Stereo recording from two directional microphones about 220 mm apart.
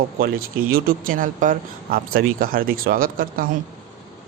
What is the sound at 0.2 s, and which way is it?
Speech, 40° right (ahead or behind).